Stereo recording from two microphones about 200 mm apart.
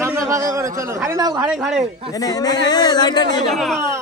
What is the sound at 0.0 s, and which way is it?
Speech, 15° right (ahead or behind).